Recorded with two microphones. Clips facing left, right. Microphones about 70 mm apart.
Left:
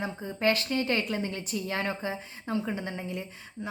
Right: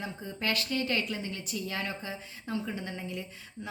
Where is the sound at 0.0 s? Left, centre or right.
Left.